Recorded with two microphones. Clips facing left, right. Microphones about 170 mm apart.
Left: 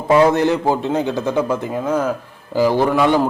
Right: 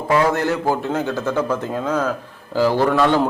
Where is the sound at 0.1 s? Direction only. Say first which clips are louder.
Left 5 dB; 20° left (ahead or behind).